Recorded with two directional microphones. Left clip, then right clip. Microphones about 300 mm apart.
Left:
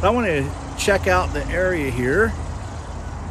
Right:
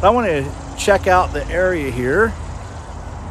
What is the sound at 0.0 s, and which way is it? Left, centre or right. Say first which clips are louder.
Speech: right 5 dB; centre.